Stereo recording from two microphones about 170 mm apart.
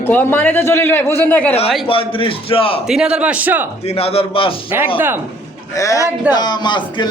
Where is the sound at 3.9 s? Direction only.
35° left (ahead or behind).